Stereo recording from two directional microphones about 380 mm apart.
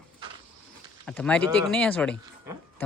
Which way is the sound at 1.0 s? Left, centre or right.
Centre.